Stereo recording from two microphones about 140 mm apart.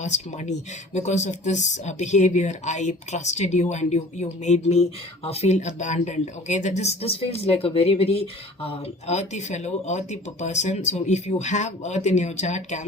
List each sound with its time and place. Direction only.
0.0 s speech: 55° left (ahead or behind)